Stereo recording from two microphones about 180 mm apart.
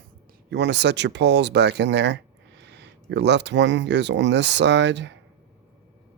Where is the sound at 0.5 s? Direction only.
70° right (ahead or behind).